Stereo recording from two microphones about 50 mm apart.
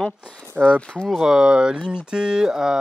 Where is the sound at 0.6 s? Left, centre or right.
Centre.